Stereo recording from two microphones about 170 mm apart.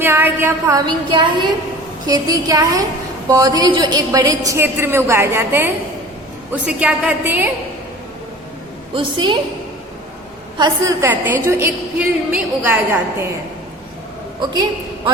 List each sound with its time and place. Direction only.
0.0 s a woman's voice: 10° right (ahead or behind)
0.9 s a woman's voice: 25° right (ahead or behind); by 7.5 s 10° right (ahead or behind)
9.0 s a woman's voice: 30° right (ahead or behind)
10.6 s a woman's voice: 15° right (ahead or behind)